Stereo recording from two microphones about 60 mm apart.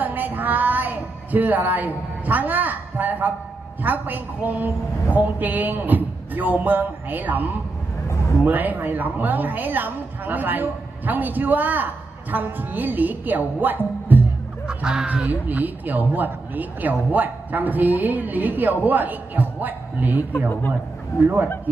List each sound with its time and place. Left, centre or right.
0.0 s a sound: right
3.8 s a woman's voice: right
8.5 s a woman's voice: right
14.1 s music: right
14.7 s honk: centre
15.0 s speech: right
20.3 s speech: left